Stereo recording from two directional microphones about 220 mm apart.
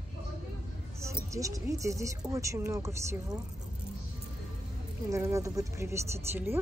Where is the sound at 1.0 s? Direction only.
15° right (ahead or behind).